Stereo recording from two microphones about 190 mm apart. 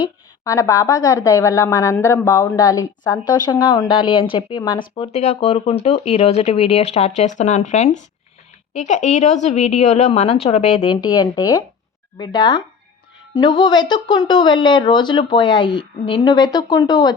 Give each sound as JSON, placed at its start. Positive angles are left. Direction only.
{"t": 0.0, "sound": "a woman's voice", "side_deg": 15}